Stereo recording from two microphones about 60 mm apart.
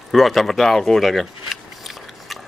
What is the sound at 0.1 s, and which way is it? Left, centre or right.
A man's voice, centre.